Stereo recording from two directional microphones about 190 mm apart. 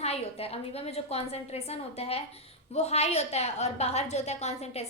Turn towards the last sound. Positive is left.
turn(degrees=35)  # may be behind; listen again after turning